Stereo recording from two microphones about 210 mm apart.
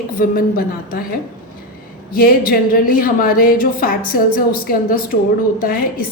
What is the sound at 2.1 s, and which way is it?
A woman's voice, 45° left (ahead or behind).